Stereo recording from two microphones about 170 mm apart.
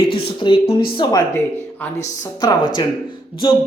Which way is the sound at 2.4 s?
25° left (ahead or behind).